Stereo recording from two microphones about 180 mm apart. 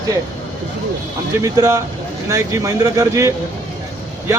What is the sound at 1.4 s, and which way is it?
Speech, 20° right (ahead or behind).